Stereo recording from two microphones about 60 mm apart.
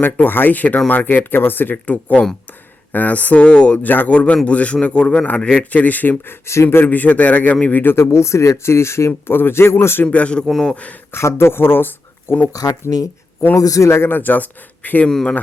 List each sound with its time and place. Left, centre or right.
0.0 s a man's voice: left; by 3.8 s centre
3.8 s a man's voice: left
6.5 s a man's voice: left
7.9 s speech: left
10.1 s a man's voice: left
10.4 s a man's voice: centre
11.1 s speech: left
13.6 s a man's voice: left
14.1 s speech: left
15.1 s a man's voice: centre